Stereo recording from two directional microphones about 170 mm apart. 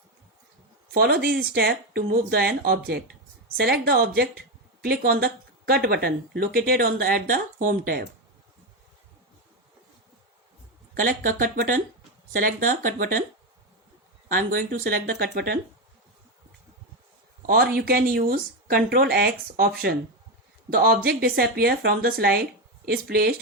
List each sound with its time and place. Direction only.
0.9 s a woman's voice: 70° right (ahead or behind)
11.0 s a woman's voice: 55° right (ahead or behind)
14.3 s a woman's voice: 55° right (ahead or behind)
17.4 s a woman's voice: 65° right (ahead or behind)
20.7 s a woman's voice: 65° right (ahead or behind)